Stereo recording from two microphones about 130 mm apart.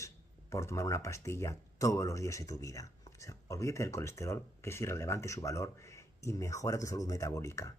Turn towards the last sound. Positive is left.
turn(degrees=20)  # may be behind; listen again after turning